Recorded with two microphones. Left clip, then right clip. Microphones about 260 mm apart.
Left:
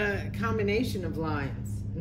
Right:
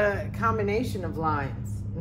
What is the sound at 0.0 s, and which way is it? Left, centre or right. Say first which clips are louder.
A woman's voice: right 6 dB; centre.